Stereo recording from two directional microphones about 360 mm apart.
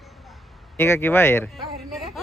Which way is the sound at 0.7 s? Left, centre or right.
Centre.